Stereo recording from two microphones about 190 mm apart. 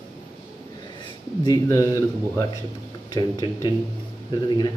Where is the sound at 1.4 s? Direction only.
15° left (ahead or behind).